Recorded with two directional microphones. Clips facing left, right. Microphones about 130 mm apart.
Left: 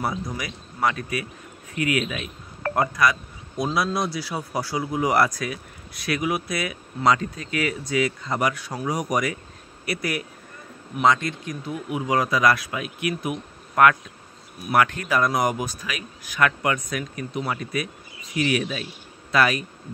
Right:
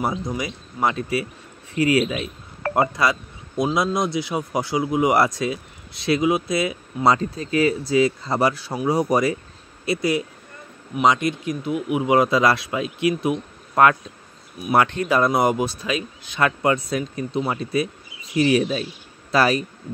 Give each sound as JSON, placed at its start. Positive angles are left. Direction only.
{"t": 0.0, "sound": "speech", "side_deg": -20}